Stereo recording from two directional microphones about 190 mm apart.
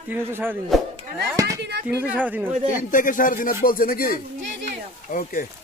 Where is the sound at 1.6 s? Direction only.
60° right (ahead or behind).